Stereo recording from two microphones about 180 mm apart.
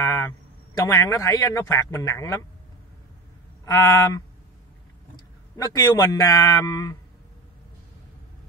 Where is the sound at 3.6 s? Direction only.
20° left (ahead or behind).